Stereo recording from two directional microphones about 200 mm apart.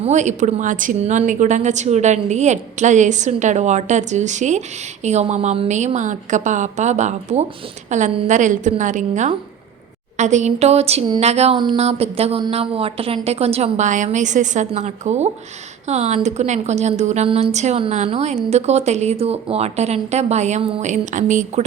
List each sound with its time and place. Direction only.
0.0 s speech: 35° right (ahead or behind)